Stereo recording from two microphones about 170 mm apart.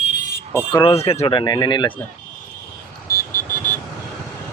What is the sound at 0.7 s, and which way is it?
Speech, 30° left (ahead or behind).